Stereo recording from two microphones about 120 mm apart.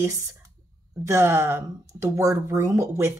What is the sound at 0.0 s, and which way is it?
Speech, 25° right (ahead or behind).